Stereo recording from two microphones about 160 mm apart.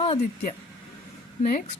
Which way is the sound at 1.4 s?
50° left (ahead or behind).